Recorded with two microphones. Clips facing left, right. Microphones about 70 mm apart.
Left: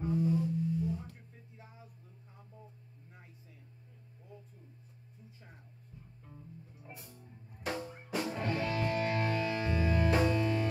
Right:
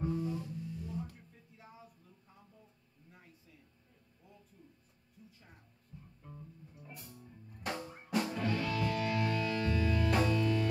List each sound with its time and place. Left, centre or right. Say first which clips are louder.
0.0 s music: left 5 dB; centre
6.8 s music: right 2 dB; centre
7.5 s drum: left 2 dB; centre
8.4 s music: even; left
8.6 s music: left 1 dB; left